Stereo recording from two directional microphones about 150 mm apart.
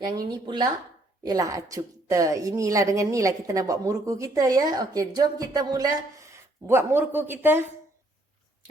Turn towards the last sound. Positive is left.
turn(degrees=-15)  # may be behind; listen again after turning